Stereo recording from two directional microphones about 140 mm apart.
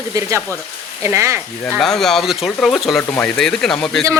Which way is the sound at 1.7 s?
5° left (ahead or behind).